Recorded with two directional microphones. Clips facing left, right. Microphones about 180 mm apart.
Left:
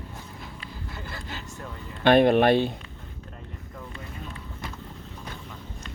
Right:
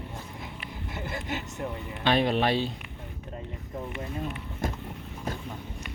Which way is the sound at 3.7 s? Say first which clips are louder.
Right 7 dB; 20° right (ahead or behind).